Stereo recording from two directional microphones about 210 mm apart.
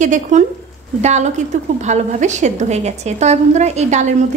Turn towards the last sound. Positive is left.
turn(degrees=-35)  # may be behind; listen again after turning